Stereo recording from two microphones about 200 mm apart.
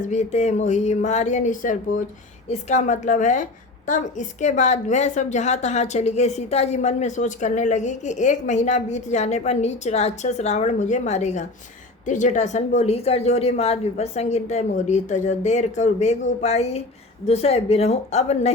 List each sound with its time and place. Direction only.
0.0 s a woman's voice: 35° left (ahead or behind)